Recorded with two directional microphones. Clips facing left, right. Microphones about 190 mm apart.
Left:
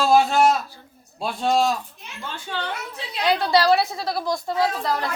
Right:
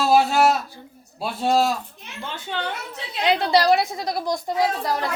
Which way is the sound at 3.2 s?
20° right (ahead or behind).